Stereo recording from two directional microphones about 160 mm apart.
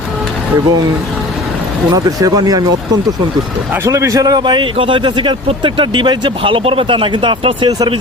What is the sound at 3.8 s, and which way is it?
A man's voice, 20° right (ahead or behind).